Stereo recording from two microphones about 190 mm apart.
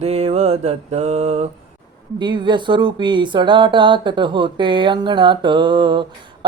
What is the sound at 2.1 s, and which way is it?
Speech, 25° right (ahead or behind).